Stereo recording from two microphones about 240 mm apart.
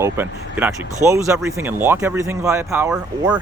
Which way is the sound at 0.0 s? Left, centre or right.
Centre.